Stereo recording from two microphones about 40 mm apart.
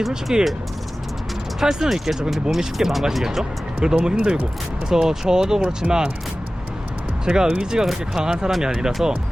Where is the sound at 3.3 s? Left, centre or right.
Centre.